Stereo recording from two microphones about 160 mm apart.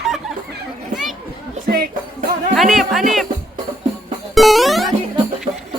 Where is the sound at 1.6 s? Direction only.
70° right (ahead or behind).